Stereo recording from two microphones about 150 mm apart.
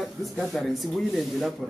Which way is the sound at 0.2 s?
Centre (ahead or behind).